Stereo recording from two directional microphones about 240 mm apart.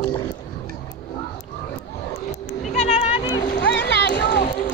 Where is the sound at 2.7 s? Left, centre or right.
Left.